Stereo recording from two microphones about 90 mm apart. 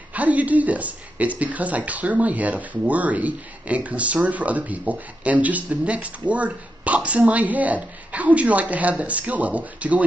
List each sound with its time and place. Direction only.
0.1 s speech: 15° right (ahead or behind)